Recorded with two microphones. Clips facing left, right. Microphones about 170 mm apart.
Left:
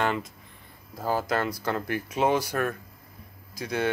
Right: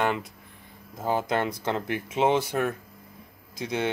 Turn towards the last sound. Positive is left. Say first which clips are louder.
# even
turn(degrees=-25)  # may be behind; listen again after turning